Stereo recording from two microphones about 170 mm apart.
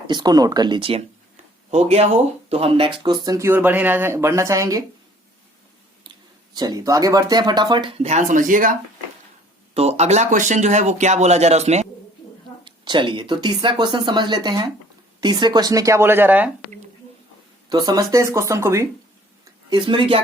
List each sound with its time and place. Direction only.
0.1 s speech: 25° right (ahead or behind)
6.5 s speech: 25° right (ahead or behind); by 8.7 s 50° right (ahead or behind)
9.7 s speech: 40° right (ahead or behind)
12.6 s speech: 30° right (ahead or behind); by 16.5 s 10° right (ahead or behind)
17.7 s speech: 25° right (ahead or behind)
19.7 s speech: 25° right (ahead or behind)